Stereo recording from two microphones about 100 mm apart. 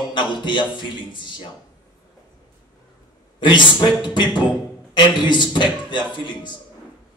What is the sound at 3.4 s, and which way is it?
A man's voice, 50° left (ahead or behind).